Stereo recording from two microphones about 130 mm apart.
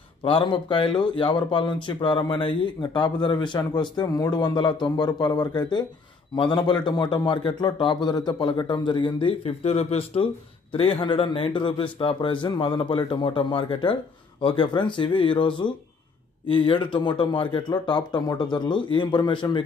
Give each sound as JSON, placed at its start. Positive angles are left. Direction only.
{"t": 0.2, "sound": "speech", "side_deg": 40}